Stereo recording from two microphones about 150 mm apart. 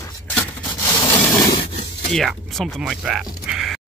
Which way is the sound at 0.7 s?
25° left (ahead or behind).